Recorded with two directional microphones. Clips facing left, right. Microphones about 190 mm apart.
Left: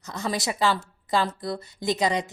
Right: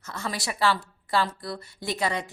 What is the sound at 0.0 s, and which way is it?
A woman's voice, 15° left (ahead or behind).